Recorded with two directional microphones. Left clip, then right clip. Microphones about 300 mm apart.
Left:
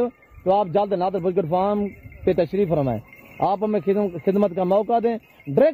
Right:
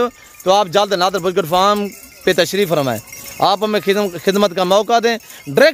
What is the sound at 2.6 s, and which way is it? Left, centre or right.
Speech, right.